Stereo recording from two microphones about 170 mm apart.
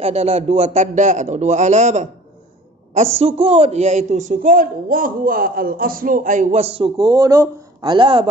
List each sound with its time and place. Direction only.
0.0 s a woman's voice: 40° right (ahead or behind)
3.2 s a woman's voice: 35° right (ahead or behind)